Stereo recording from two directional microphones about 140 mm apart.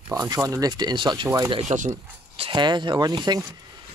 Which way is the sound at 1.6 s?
65° right (ahead or behind).